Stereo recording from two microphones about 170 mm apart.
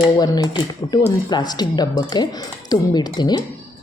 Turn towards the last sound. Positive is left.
turn(degrees=25)  # may be behind; listen again after turning